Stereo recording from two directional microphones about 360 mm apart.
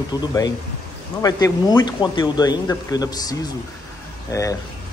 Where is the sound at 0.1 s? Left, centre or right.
Centre.